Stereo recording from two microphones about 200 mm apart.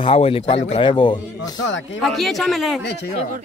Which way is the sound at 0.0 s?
30° left (ahead or behind).